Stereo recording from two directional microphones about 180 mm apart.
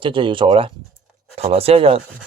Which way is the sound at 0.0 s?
30° right (ahead or behind).